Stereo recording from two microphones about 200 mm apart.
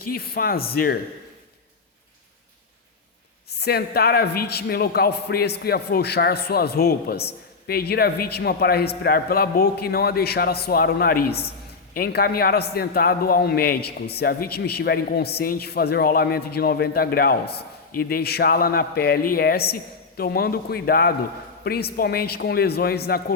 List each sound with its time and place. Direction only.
0.1 s a man's voice: 50° left (ahead or behind)
3.5 s a man's voice: 55° left (ahead or behind)